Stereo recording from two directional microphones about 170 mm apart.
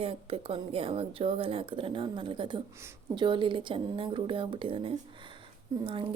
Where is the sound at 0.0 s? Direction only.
35° right (ahead or behind).